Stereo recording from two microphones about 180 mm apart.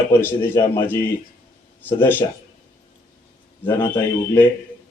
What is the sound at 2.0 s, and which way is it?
Speech, 10° left (ahead or behind).